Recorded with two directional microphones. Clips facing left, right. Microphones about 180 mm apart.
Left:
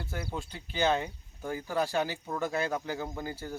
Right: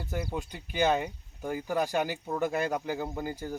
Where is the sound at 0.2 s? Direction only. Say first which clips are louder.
Right 3 dB; 15° right (ahead or behind).